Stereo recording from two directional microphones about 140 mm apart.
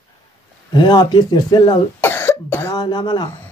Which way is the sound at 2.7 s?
30° left (ahead or behind).